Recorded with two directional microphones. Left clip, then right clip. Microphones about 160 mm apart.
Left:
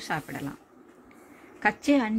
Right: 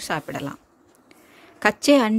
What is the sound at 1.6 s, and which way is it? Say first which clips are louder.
Speech: right 7 dB; 40° right (ahead or behind).